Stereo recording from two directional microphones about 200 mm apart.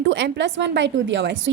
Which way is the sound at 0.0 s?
65° right (ahead or behind).